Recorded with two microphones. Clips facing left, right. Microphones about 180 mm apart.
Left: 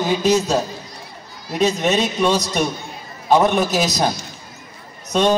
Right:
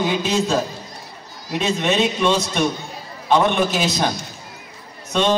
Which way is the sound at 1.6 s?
40° left (ahead or behind).